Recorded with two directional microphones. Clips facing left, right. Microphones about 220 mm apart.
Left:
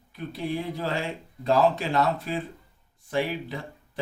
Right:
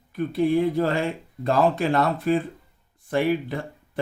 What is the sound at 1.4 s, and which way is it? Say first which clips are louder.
Speech: right 2 dB; 55° right (ahead or behind).